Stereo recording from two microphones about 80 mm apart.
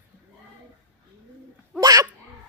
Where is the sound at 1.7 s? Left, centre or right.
Right.